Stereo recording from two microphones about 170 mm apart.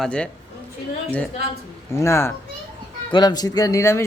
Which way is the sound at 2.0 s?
15° left (ahead or behind).